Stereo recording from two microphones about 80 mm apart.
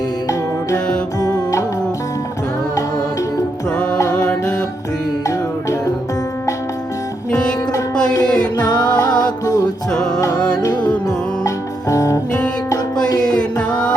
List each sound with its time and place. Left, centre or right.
1.2 s music: left
4.1 s music: centre
7.3 s music: centre
8.5 s music: left
10.3 s music: centre
10.6 s music: left
11.4 s music: left
13.2 s music: centre